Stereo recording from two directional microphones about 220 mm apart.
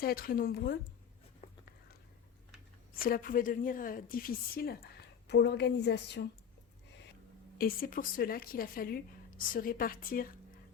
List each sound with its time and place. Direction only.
0.0 s speech: 40° left (ahead or behind)
1.4 s a sound: 30° left (ahead or behind)
2.9 s a woman's voice: 40° left (ahead or behind)
7.6 s a woman's voice: 40° left (ahead or behind)